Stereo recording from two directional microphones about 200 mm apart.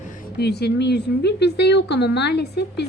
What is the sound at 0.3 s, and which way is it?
A woman's voice, 55° left (ahead or behind).